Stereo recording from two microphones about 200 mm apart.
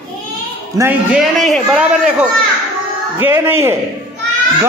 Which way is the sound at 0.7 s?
15° right (ahead or behind).